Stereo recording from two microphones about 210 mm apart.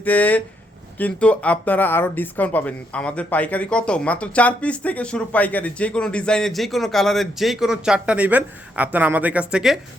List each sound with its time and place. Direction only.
0.0 s speech: 10° left (ahead or behind)